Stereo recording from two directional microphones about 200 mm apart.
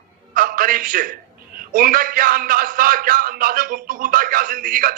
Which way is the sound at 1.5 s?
45° right (ahead or behind).